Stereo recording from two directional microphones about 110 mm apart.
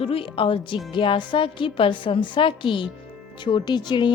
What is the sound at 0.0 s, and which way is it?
Speech, 55° left (ahead or behind).